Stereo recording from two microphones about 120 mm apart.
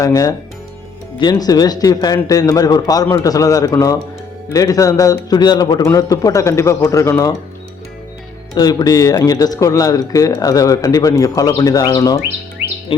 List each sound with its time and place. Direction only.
0.0 s speech: 30° left (ahead or behind)
8.5 s speech: 35° left (ahead or behind)
12.9 s a sound: 45° left (ahead or behind)